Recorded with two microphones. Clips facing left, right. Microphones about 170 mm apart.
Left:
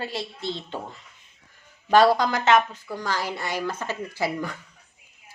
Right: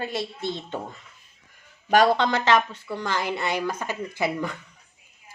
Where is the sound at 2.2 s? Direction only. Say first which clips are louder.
Left 1 dB; 30° right (ahead or behind).